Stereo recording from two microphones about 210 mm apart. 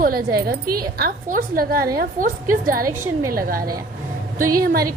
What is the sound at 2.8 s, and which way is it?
Speech, 15° right (ahead or behind).